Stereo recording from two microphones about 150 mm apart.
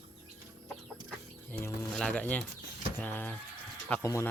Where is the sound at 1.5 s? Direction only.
15° left (ahead or behind).